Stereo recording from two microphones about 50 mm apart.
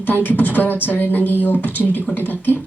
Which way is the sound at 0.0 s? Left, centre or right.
Left.